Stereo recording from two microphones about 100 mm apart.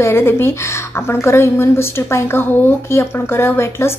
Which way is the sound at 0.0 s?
25° left (ahead or behind).